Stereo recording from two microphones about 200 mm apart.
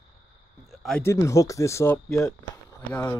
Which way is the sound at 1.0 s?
15° left (ahead or behind).